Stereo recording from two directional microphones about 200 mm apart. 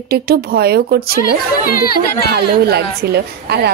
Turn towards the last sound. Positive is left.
turn(degrees=-55)  # may be behind; listen again after turning